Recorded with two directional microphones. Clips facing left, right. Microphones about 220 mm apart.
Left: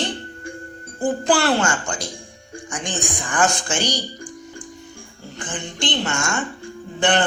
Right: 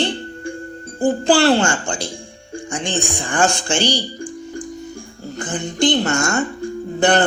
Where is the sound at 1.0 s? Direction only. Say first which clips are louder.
Right 5 dB; 30° right (ahead or behind).